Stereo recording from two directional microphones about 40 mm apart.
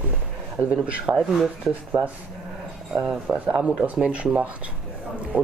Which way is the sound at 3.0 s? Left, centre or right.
Right.